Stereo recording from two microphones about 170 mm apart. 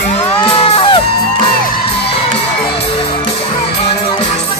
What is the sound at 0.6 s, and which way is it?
Music, 35° left (ahead or behind).